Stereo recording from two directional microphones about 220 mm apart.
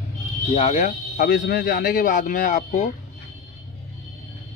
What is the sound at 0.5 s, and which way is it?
Speech, 30° left (ahead or behind).